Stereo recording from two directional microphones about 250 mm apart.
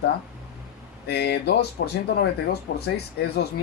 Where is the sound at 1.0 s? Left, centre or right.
Left.